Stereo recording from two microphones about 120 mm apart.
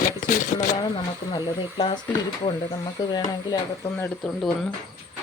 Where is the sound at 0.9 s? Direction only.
40° left (ahead or behind).